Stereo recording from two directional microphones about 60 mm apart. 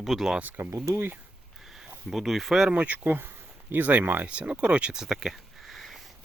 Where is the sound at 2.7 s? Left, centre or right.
Right.